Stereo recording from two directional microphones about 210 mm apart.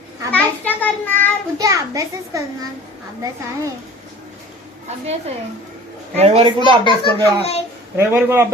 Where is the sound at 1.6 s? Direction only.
15° right (ahead or behind).